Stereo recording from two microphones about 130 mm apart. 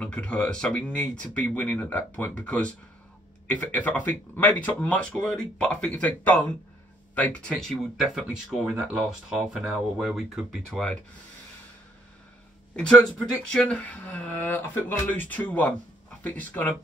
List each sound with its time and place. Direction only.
0.0 s speech: 10° left (ahead or behind)
12.7 s speech: 5° left (ahead or behind)